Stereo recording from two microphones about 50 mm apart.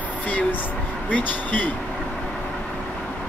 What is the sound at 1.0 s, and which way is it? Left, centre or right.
Speech, left.